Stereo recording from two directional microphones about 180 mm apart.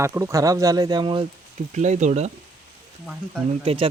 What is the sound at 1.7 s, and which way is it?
Speech, 40° right (ahead or behind).